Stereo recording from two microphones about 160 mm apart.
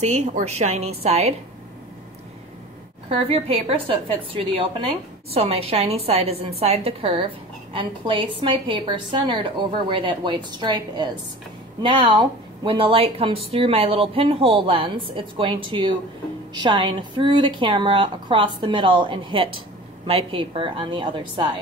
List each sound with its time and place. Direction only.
0.0 s a woman's voice: 45° right (ahead or behind)
3.1 s a woman's voice: 35° right (ahead or behind)